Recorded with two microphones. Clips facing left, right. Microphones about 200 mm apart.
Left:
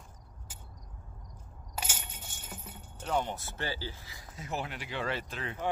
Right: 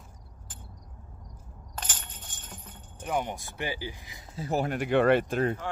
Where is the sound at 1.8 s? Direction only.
10° left (ahead or behind).